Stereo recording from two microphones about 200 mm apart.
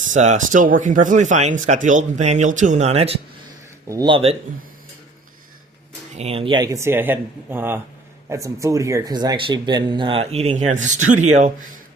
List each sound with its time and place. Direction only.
0.1 s speech: 40° right (ahead or behind)
3.8 s speech: 20° right (ahead or behind)
6.1 s speech: 30° right (ahead or behind)